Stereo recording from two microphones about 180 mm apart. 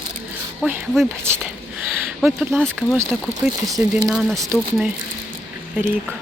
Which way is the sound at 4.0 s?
Centre (ahead or behind).